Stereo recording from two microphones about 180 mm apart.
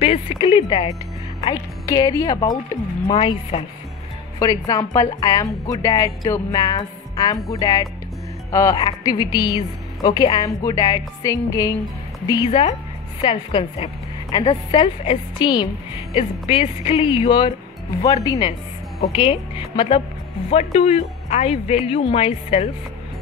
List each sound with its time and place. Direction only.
0.0 s a woman's voice: 35° left (ahead or behind)
12.4 s a woman's voice: 35° left (ahead or behind)